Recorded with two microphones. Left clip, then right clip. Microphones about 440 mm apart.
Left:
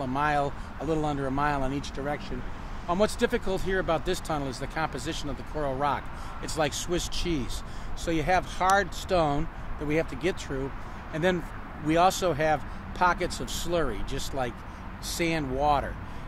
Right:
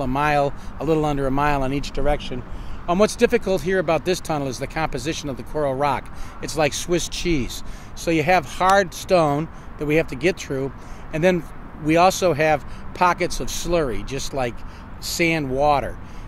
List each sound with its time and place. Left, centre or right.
0.0 s speech: right